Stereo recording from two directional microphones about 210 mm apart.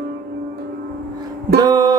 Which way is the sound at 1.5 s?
20° right (ahead or behind).